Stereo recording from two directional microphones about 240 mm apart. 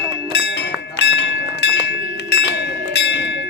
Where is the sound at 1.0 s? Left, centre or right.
Left.